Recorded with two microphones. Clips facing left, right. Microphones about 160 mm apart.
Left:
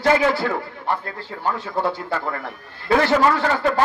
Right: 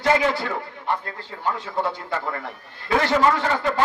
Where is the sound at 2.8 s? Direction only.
35° left (ahead or behind).